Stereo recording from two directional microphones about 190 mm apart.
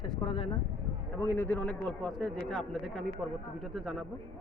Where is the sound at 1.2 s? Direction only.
10° left (ahead or behind).